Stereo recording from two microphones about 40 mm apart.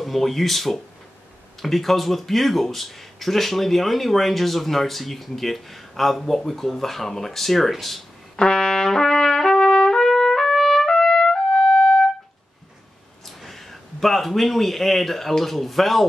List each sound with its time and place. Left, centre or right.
0.0 s speech: centre
8.4 s trumpet: centre
13.4 s speech: centre